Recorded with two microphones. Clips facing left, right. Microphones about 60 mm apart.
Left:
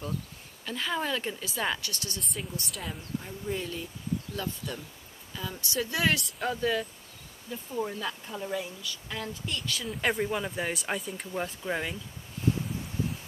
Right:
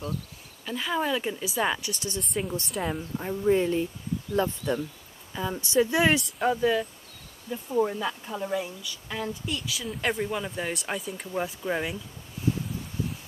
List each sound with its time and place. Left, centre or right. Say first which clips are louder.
0.7 s speech: right 3 dB; centre
2.9 s speech: right 6 dB; right
6.4 s speech: right 5 dB; centre